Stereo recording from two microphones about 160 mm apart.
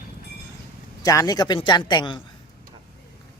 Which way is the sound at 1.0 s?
20° left (ahead or behind).